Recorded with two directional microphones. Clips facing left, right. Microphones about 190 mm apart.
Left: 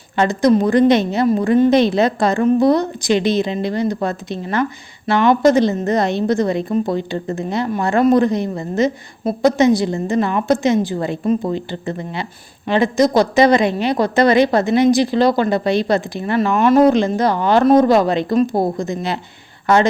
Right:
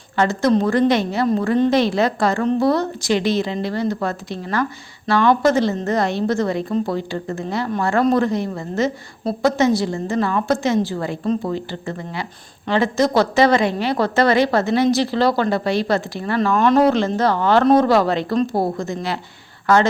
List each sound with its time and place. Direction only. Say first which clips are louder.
0.2 s a woman's voice: left 3 dB; 15° left (ahead or behind)